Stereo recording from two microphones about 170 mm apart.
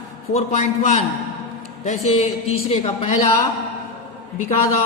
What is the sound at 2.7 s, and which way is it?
Speech, 35° left (ahead or behind).